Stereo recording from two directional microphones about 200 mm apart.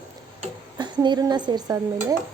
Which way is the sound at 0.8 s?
20° right (ahead or behind).